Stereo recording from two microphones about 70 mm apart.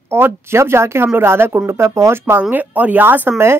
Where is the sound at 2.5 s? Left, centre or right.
Right.